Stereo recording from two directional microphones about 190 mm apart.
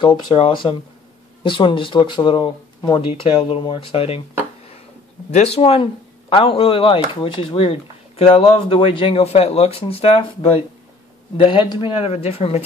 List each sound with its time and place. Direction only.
0.0 s speech: 25° left (ahead or behind)
5.3 s speech: 35° left (ahead or behind)